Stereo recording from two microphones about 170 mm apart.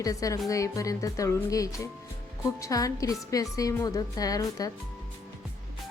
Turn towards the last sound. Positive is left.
turn(degrees=20)  # may be behind; listen again after turning